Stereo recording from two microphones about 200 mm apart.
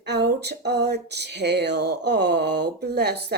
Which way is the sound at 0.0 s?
55° right (ahead or behind).